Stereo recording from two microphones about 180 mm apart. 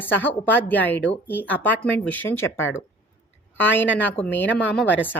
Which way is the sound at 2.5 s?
90° left.